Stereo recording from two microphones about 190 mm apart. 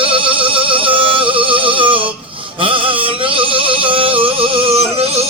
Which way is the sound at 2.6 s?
25° right (ahead or behind).